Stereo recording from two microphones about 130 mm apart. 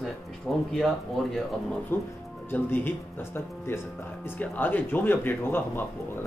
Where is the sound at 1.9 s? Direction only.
20° left (ahead or behind).